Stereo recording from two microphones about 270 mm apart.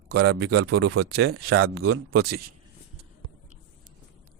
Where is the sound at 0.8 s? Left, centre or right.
Right.